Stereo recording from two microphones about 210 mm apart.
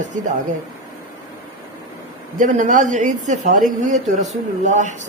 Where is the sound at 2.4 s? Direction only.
35° right (ahead or behind).